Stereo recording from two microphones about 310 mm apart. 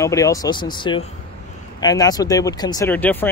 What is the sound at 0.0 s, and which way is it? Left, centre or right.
Speech, centre.